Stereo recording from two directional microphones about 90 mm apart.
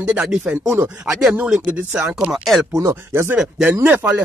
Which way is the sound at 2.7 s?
35° right (ahead or behind).